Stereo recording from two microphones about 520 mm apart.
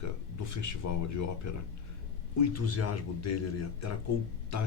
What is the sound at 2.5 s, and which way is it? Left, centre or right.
Speech, left.